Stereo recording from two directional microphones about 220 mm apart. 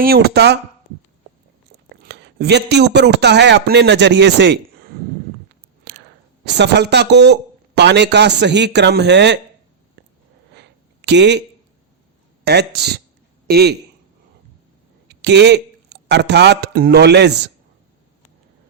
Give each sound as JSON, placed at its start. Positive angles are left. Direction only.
{"t": 0.0, "sound": "a man's voice", "side_deg": -45}
{"t": 2.0, "sound": "a man's voice", "side_deg": -50}
{"t": 5.9, "sound": "whispering", "side_deg": -50}
{"t": 6.4, "sound": "a man's voice", "side_deg": -50}
{"t": 10.5, "sound": "a sound", "side_deg": -50}
{"t": 12.5, "sound": "a man's voice", "side_deg": -50}
{"t": 15.0, "sound": "speech", "side_deg": -50}